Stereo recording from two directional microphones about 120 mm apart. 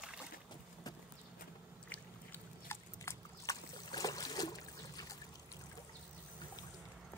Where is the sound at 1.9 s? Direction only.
15° left (ahead or behind).